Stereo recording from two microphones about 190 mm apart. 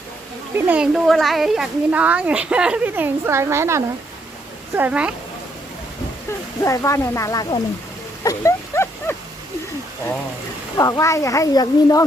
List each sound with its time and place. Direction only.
0.5 s speech: 5° right (ahead or behind)
6.6 s speech: 15° left (ahead or behind)
8.2 s dog: 15° left (ahead or behind)
10.8 s speech: 15° left (ahead or behind)